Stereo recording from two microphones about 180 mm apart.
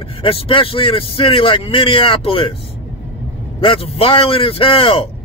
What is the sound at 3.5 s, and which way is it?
Speech, 30° left (ahead or behind).